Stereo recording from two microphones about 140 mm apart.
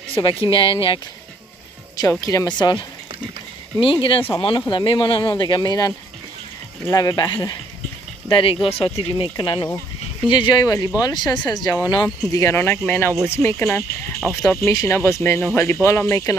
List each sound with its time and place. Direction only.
0.1 s speech: 40° left (ahead or behind)
2.0 s speech: 25° left (ahead or behind)
3.8 s speech: 40° left (ahead or behind); by 16.3 s 20° left (ahead or behind)